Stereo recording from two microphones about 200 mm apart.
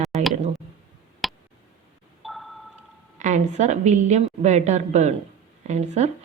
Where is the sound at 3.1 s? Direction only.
35° right (ahead or behind).